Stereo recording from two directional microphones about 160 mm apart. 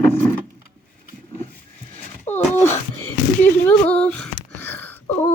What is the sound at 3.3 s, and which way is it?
Female singing, 10° left (ahead or behind).